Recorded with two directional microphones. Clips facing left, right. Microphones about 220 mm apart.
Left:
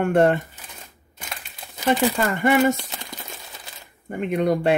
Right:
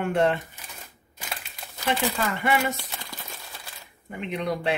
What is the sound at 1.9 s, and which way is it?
Speech, 45° left (ahead or behind).